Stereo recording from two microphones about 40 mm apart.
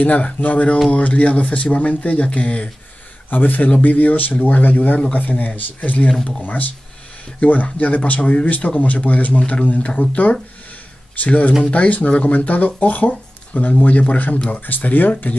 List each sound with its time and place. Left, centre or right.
0.0 s speech: left
3.3 s speech: left